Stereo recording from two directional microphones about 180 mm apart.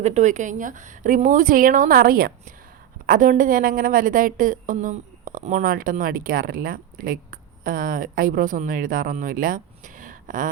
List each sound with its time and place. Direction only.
0.0 s a woman's voice: 40° right (ahead or behind)